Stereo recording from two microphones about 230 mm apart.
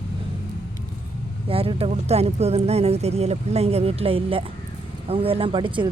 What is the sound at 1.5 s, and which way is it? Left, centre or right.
Speech, right.